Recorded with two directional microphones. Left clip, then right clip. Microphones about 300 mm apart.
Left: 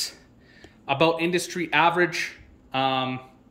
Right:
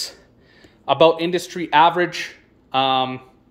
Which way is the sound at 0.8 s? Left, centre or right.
Centre.